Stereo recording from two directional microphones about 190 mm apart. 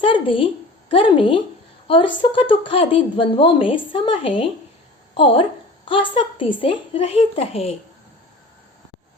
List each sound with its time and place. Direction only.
0.0 s a woman's voice: 25° left (ahead or behind)